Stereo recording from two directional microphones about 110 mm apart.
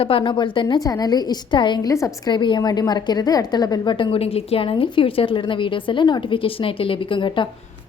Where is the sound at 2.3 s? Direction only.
45° left (ahead or behind).